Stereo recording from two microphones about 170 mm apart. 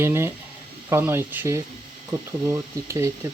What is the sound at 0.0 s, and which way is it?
Speech, 15° right (ahead or behind).